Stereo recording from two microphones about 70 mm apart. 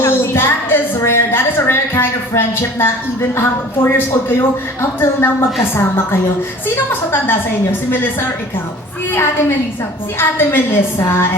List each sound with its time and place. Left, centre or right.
0.0 s a woman's voice: left
7.1 s a woman's voice: left
10.2 s a woman's voice: left